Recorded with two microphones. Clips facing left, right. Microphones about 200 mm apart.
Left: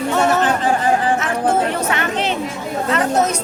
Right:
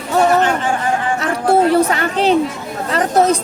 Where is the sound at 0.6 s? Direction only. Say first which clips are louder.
Left 2 dB; 35° left (ahead or behind).